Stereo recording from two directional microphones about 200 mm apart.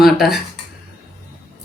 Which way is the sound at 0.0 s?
Centre (ahead or behind).